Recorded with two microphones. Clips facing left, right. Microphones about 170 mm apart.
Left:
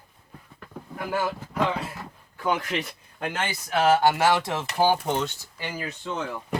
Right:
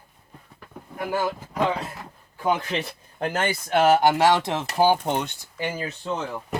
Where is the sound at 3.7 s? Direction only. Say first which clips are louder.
Right 2 dB; 20° right (ahead or behind).